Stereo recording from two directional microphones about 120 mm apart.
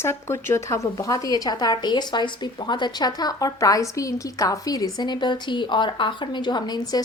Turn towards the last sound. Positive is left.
turn(degrees=35)  # may be behind; listen again after turning